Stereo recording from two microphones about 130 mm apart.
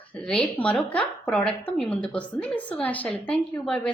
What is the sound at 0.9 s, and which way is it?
A woman's voice, 10° left (ahead or behind).